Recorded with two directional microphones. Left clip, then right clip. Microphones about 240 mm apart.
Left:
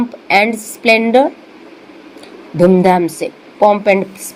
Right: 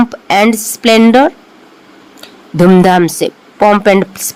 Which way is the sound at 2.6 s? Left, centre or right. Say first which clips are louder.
Right 3 dB; right.